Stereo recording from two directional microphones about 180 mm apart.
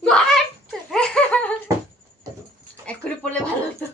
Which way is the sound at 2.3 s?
20° right (ahead or behind).